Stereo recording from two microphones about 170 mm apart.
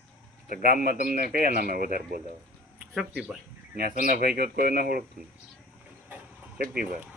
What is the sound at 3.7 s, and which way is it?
A man's voice, 65° right (ahead or behind).